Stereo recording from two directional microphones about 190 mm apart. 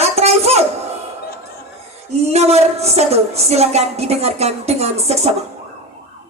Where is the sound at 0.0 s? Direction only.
35° right (ahead or behind).